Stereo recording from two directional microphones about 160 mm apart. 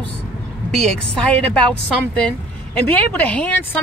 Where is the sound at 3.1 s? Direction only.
10° left (ahead or behind).